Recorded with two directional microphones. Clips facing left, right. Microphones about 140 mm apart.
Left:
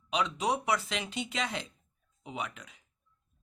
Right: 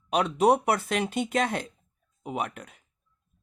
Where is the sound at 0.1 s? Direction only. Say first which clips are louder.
Right 9 dB; 55° right (ahead or behind).